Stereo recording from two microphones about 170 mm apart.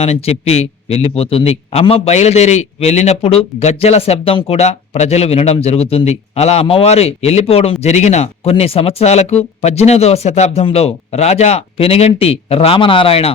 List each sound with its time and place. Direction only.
0.0 s a man's voice: 35° left (ahead or behind)